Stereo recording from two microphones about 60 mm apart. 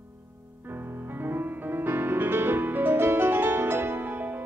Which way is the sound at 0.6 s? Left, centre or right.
Right.